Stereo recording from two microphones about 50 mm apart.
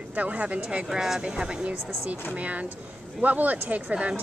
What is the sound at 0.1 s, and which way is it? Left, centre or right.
Speech, right.